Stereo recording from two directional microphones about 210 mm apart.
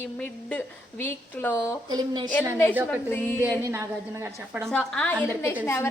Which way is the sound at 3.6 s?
15° right (ahead or behind).